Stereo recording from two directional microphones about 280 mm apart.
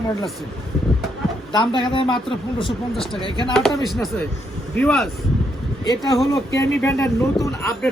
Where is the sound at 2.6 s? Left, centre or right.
Centre.